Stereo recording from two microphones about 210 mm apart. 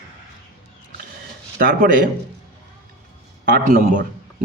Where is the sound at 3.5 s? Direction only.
40° right (ahead or behind).